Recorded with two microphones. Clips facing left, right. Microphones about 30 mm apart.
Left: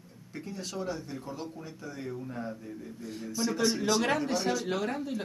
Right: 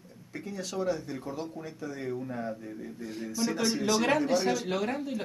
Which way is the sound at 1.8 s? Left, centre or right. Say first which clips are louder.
Right 4 dB; centre.